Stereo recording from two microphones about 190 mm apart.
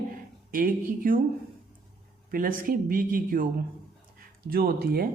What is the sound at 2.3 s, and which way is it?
Speech, 50° right (ahead or behind).